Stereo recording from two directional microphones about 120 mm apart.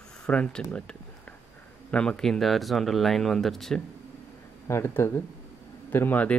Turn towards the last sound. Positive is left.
turn(degrees=15)  # may be behind; listen again after turning